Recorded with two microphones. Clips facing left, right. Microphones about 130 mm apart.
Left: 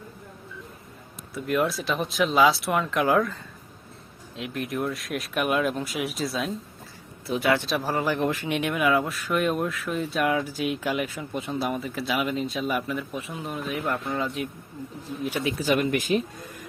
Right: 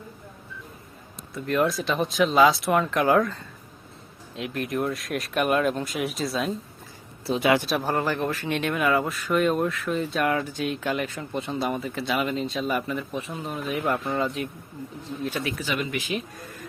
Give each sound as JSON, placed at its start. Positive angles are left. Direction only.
{"t": 1.3, "sound": "speech", "side_deg": 5}
{"t": 4.4, "sound": "speech", "side_deg": 0}
{"t": 7.3, "sound": "speech", "side_deg": -20}
{"t": 7.7, "sound": "speech", "side_deg": 0}
{"t": 8.0, "sound": "speech", "side_deg": 15}
{"t": 15.2, "sound": "speech", "side_deg": 15}
{"t": 15.6, "sound": "speech", "side_deg": 50}
{"t": 16.4, "sound": "a sound", "side_deg": 15}